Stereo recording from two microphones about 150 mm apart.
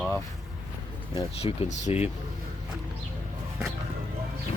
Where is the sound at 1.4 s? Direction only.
45° left (ahead or behind).